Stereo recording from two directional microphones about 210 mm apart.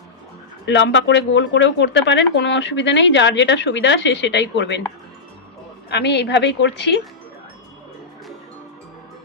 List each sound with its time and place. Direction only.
0.6 s speech: 60° left (ahead or behind)
5.9 s speech: 55° left (ahead or behind)